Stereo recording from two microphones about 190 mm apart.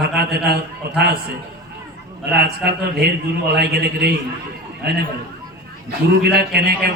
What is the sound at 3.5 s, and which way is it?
Speech, 55° right (ahead or behind).